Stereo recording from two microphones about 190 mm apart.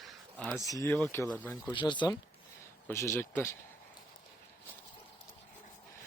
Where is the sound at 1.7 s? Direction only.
25° left (ahead or behind).